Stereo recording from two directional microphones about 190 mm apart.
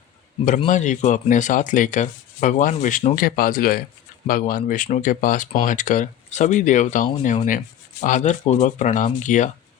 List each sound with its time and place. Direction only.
0.7 s speech: 40° left (ahead or behind)